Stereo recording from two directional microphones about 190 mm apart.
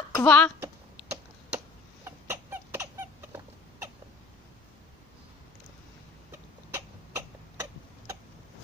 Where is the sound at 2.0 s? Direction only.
10° right (ahead or behind).